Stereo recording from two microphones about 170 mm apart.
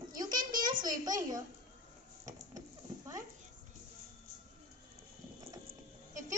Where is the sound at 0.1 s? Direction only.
20° right (ahead or behind).